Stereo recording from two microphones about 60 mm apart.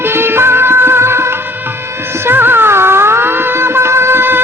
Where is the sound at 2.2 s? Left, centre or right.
Right.